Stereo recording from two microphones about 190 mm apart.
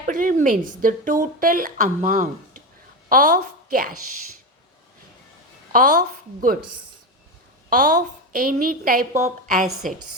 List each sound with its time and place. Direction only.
0.1 s a woman's voice: 45° right (ahead or behind)
5.7 s a woman's voice: 45° right (ahead or behind)
7.7 s a woman's voice: 45° right (ahead or behind)